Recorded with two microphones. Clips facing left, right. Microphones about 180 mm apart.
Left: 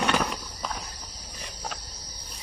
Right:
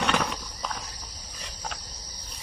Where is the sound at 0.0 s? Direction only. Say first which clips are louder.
Left 1 dB; 5° left (ahead or behind).